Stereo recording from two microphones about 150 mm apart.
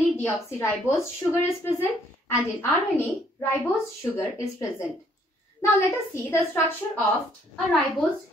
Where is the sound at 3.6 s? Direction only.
15° left (ahead or behind).